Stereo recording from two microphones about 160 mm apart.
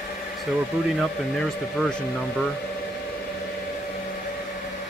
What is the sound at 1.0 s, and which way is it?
Speech, 5° left (ahead or behind).